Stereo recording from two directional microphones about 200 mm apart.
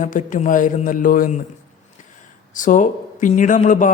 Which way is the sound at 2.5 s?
40° left (ahead or behind).